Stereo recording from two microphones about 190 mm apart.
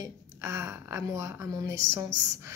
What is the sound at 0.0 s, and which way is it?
Speech, 15° right (ahead or behind).